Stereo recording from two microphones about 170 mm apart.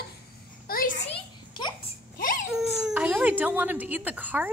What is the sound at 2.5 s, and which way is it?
Speech, 5° right (ahead or behind).